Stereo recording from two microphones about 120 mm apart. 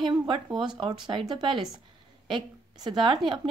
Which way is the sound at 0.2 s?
40° right (ahead or behind).